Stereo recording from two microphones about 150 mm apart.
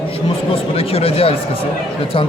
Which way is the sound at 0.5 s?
40° left (ahead or behind).